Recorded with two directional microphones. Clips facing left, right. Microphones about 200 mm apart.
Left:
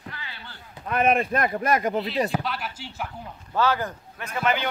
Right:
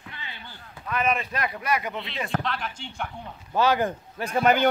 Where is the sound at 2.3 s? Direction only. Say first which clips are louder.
Even; 5° left (ahead or behind).